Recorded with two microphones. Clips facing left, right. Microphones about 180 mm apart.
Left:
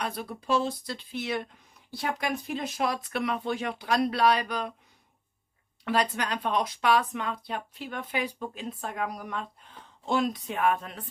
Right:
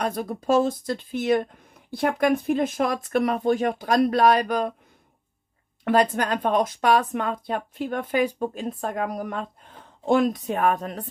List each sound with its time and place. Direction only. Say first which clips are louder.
0.0 s a woman's voice: right 7 dB; 45° right (ahead or behind)
5.9 s a woman's voice: right 7 dB; 50° right (ahead or behind)